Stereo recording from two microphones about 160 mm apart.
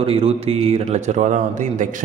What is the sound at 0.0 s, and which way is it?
Speech, 35° right (ahead or behind).